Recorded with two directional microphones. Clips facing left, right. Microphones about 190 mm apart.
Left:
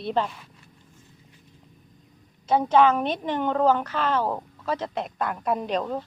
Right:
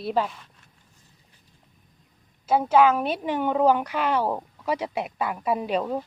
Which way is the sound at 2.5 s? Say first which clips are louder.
Even; 5° right (ahead or behind).